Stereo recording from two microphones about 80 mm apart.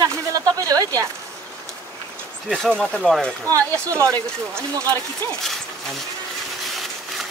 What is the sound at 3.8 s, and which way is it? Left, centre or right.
Speech, right.